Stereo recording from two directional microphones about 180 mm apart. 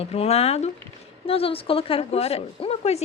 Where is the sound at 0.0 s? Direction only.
35° left (ahead or behind).